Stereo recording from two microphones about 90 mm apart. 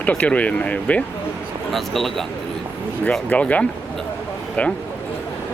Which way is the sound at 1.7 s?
5° left (ahead or behind).